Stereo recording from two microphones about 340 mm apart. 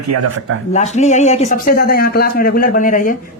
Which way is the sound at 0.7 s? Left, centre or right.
Centre.